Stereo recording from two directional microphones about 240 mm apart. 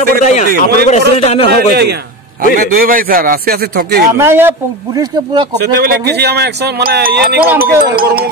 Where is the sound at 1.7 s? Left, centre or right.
Right.